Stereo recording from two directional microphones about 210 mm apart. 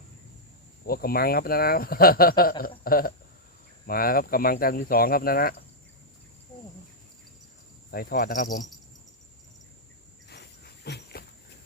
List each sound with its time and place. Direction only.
0.9 s speech: 45° left (ahead or behind)
7.9 s speech: 45° left (ahead or behind)
10.2 s dog: 50° left (ahead or behind)